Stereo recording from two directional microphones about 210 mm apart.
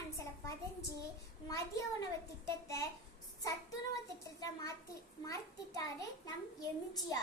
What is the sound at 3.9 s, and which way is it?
A child's voice, 15° left (ahead or behind).